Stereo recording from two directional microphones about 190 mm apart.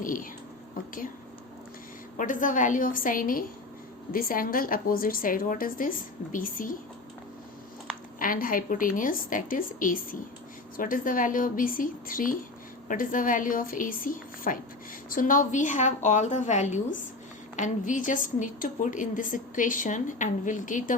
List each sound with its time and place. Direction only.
0.0 s a sound: 45° left (ahead or behind)
2.1 s a woman's voice: 45° left (ahead or behind)
8.2 s a woman's voice: 45° left (ahead or behind)